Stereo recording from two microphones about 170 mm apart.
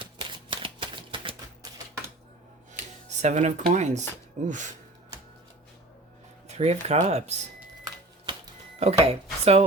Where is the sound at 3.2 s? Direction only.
45° right (ahead or behind).